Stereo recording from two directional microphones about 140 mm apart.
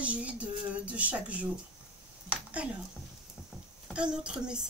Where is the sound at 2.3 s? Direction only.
10° right (ahead or behind).